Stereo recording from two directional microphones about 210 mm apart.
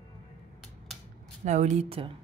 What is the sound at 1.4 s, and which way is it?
Speech, 35° right (ahead or behind).